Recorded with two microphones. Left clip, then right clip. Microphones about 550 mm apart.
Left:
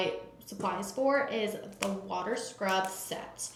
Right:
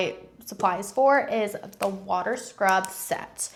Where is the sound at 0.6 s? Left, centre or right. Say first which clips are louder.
Right 9 dB; right.